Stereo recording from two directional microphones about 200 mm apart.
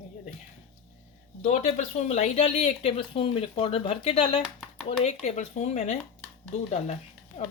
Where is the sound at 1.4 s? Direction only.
35° left (ahead or behind).